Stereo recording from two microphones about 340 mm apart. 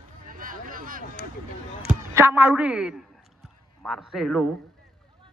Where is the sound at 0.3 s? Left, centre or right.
Right.